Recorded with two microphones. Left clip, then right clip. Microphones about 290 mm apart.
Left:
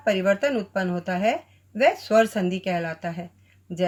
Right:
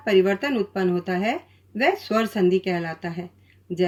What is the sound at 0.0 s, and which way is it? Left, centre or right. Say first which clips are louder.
Speech: right 1 dB; left.